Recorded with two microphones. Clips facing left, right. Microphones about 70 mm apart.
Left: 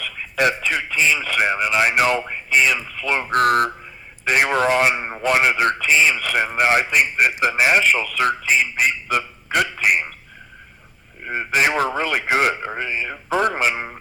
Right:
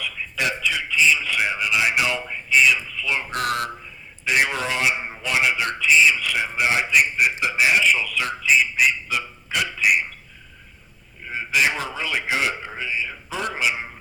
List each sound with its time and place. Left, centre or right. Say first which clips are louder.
0.0 s a man's voice: left 6 dB; left
11.2 s a man's voice: left 2 dB; left